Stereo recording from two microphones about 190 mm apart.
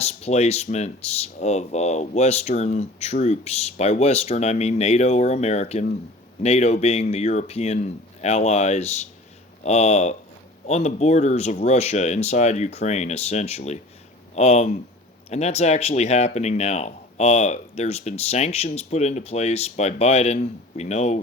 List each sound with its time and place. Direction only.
0.0 s speech: 35° left (ahead or behind)